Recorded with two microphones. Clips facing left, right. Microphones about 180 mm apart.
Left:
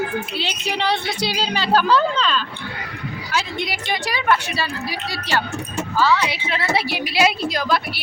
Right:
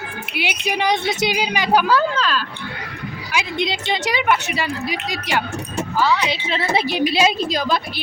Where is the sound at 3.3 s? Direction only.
20° right (ahead or behind).